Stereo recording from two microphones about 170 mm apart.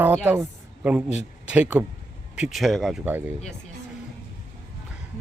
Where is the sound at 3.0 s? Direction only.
10° right (ahead or behind).